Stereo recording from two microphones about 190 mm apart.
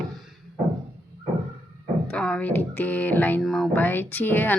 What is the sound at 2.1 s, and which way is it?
Speech, 5° left (ahead or behind).